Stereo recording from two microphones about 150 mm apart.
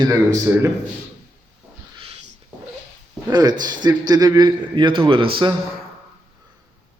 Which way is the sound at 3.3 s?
25° right (ahead or behind).